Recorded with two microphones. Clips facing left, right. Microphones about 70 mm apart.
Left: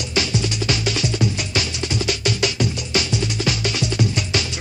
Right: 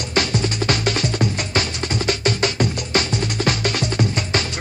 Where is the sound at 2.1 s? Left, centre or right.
Right.